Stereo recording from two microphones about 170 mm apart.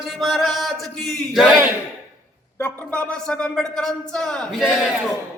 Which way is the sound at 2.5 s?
10° left (ahead or behind).